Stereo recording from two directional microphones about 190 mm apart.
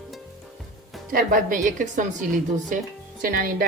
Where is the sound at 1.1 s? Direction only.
45° right (ahead or behind).